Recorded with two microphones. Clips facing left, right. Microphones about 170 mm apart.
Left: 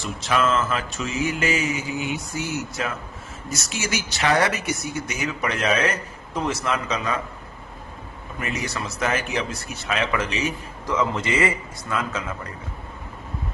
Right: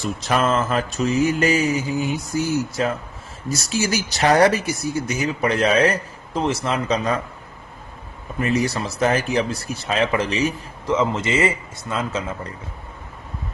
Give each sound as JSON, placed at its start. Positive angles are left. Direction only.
{"t": 0.0, "sound": "speech", "side_deg": -40}
{"t": 8.4, "sound": "speech", "side_deg": -35}
{"t": 10.8, "sound": "a man's voice", "side_deg": -25}